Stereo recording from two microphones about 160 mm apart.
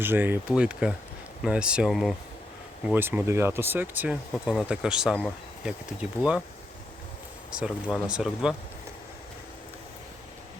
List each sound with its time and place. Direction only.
0.0 s speech: 15° right (ahead or behind)
2.8 s speech: 10° right (ahead or behind)
8.0 s speech: 5° right (ahead or behind)